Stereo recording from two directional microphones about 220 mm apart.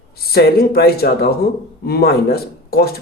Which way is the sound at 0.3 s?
45° left (ahead or behind).